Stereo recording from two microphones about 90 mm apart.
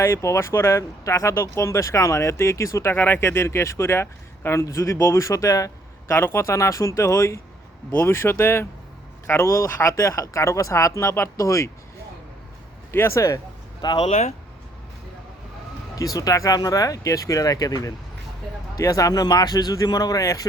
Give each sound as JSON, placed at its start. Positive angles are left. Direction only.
{"t": 0.0, "sound": "speech", "side_deg": 30}
{"t": 6.1, "sound": "speech", "side_deg": 30}
{"t": 12.9, "sound": "speech", "side_deg": 30}
{"t": 13.8, "sound": "speech", "side_deg": 55}
{"t": 16.0, "sound": "speech", "side_deg": 40}